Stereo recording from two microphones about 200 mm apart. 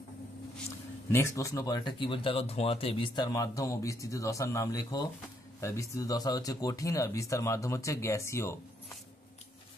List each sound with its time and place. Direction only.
0.7 s speech: 15° left (ahead or behind)